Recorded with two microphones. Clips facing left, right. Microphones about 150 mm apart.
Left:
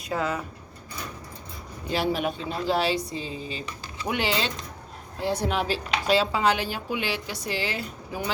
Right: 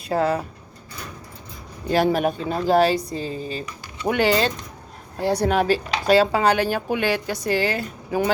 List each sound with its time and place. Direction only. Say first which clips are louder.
0.1 s speech: right 7 dB; 35° right (ahead or behind)
1.9 s speech: right 7 dB; 50° right (ahead or behind)